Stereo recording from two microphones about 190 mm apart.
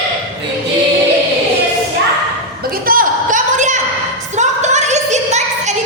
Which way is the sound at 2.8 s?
45° right (ahead or behind).